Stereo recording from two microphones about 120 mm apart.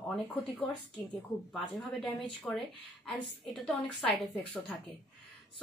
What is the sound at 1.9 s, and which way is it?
Speech, centre (ahead or behind).